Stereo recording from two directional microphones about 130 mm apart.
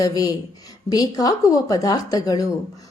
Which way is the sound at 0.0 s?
30° left (ahead or behind).